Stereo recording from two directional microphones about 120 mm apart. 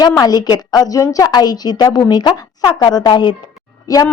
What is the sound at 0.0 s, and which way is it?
A woman's voice, 35° left (ahead or behind).